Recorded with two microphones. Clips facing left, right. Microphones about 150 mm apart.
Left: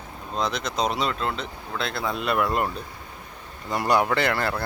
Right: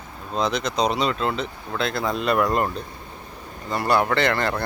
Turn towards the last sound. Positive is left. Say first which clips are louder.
# right 2 dB
turn(degrees=5)  # may be behind; listen again after turning